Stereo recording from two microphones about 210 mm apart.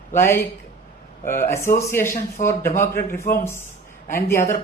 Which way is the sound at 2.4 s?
35° left (ahead or behind).